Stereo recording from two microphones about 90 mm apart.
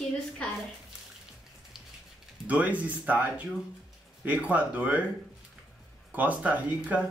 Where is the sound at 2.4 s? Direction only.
15° right (ahead or behind).